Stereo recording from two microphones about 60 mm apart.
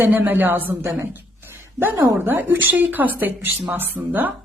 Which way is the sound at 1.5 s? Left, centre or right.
Right.